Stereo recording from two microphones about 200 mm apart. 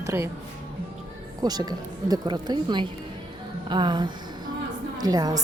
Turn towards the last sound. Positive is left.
turn(degrees=-20)  # may be behind; listen again after turning